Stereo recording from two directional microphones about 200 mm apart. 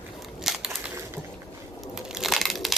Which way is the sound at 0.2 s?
Centre (ahead or behind).